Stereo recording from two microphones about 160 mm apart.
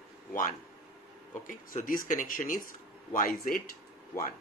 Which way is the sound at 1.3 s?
55° left (ahead or behind).